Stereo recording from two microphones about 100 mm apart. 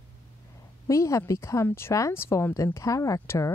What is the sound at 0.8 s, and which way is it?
Speech, 30° left (ahead or behind).